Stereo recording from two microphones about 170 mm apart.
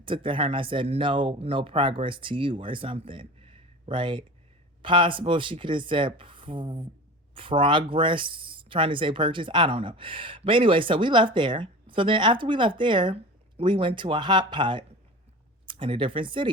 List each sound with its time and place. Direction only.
0.0 s speech: 30° right (ahead or behind)